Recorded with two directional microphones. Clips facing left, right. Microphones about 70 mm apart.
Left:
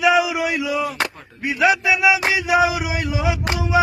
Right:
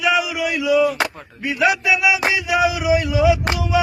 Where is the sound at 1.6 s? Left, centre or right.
Left.